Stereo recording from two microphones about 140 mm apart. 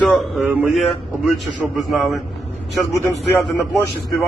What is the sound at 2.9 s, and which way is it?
Speech, 25° right (ahead or behind).